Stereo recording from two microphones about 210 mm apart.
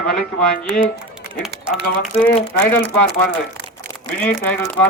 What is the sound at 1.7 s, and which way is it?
Speech, centre (ahead or behind).